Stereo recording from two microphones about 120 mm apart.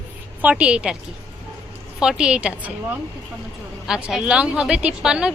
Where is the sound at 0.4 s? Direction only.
10° right (ahead or behind).